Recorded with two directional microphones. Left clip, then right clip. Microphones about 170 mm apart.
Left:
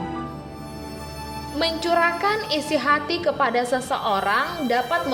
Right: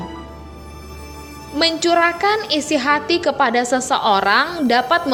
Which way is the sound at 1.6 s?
20° right (ahead or behind).